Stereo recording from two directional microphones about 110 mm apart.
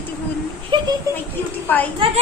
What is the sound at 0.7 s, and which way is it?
Speech, 50° right (ahead or behind).